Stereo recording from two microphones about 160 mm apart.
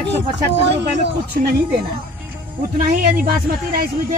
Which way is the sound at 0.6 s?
90° right.